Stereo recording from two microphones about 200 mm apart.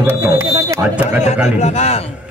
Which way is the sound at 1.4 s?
35° left (ahead or behind).